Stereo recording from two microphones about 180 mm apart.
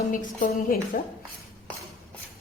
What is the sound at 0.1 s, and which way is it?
Speech, 45° left (ahead or behind).